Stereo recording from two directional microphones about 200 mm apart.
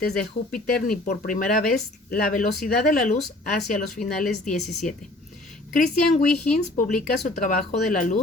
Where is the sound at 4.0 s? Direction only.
Centre (ahead or behind).